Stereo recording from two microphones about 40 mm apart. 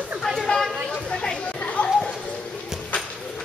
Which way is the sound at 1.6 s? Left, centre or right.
Left.